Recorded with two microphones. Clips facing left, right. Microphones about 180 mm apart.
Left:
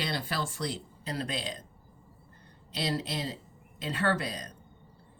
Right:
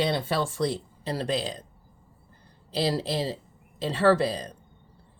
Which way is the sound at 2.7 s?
35° right (ahead or behind).